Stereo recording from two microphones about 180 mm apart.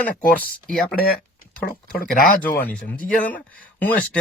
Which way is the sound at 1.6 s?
55° left (ahead or behind).